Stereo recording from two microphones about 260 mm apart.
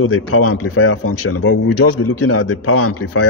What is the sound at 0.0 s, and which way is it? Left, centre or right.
Speech, left.